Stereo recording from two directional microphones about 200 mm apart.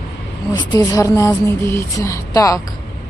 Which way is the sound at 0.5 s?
20° left (ahead or behind).